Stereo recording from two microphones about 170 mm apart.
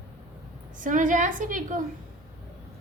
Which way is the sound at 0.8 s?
50° right (ahead or behind).